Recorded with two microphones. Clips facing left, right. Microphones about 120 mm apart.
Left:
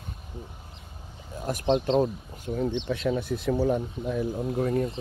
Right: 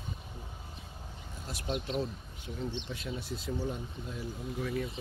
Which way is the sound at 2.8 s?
75° left (ahead or behind).